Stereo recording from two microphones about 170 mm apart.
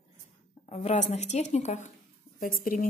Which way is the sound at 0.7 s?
40° left (ahead or behind).